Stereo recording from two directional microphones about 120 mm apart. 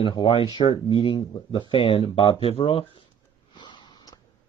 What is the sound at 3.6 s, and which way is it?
Sniff, 40° left (ahead or behind).